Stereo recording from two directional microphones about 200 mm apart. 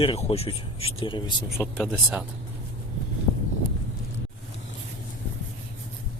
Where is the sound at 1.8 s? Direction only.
5° right (ahead or behind).